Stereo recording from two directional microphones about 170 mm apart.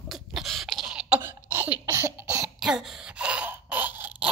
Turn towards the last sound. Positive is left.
turn(degrees=-10)  # may be behind; listen again after turning